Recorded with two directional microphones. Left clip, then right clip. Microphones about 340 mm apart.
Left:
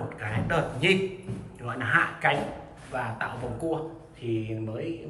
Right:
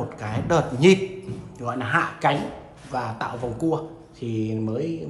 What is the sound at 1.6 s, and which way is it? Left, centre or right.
Speech, centre.